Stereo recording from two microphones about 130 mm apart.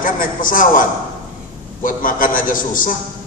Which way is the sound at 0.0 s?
90° left.